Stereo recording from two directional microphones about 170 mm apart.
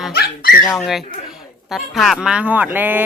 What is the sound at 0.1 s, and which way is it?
Dog, 65° left (ahead or behind).